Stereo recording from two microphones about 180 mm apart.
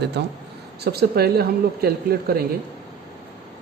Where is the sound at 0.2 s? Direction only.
70° right (ahead or behind).